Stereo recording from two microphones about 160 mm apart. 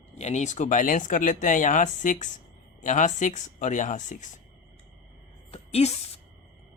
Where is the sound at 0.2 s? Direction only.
45° left (ahead or behind).